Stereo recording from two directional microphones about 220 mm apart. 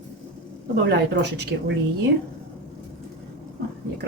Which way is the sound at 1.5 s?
50° right (ahead or behind).